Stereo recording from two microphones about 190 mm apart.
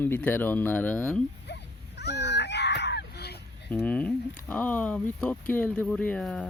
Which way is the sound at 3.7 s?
10° left (ahead or behind).